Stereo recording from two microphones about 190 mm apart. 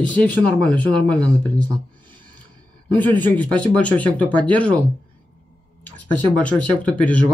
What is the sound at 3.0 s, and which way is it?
Speech, 10° left (ahead or behind).